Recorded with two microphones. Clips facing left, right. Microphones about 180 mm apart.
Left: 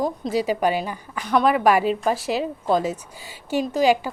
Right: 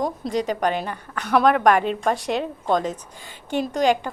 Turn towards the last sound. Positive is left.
turn(degrees=5)  # may be behind; listen again after turning